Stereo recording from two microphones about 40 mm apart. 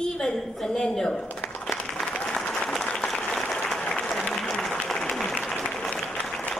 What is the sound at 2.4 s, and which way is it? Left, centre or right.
Applause, left.